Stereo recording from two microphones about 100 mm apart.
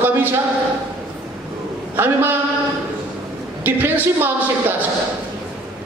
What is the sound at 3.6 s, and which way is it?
Speech, 20° right (ahead or behind).